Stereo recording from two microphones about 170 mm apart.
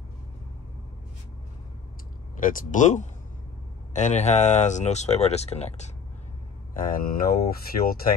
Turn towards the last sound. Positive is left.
turn(degrees=65)  # may be behind; listen again after turning